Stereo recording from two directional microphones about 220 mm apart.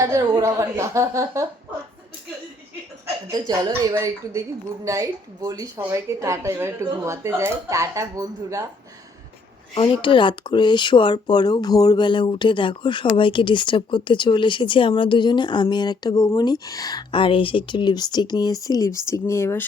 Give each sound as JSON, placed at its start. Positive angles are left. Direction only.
{"t": 0.0, "sound": "speech", "side_deg": -15}
{"t": 3.2, "sound": "speech", "side_deg": -20}
{"t": 9.7, "sound": "speech", "side_deg": 25}